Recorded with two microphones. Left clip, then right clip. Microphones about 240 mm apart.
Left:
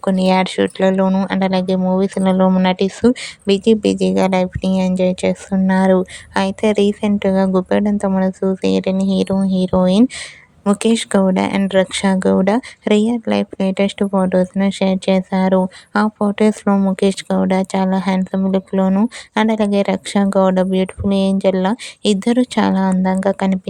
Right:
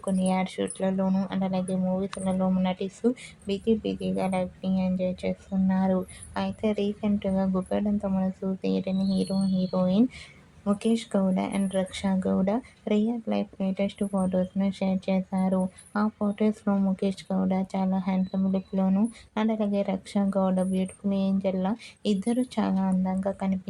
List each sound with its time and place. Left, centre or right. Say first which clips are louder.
0.0 s speech: left 13 dB; left